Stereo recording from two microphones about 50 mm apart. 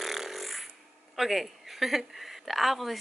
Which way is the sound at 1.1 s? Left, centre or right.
Centre.